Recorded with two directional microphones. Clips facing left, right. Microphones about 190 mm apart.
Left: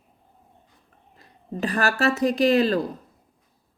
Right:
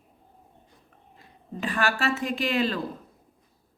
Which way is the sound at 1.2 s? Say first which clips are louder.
Left 5 dB; 40° left (ahead or behind).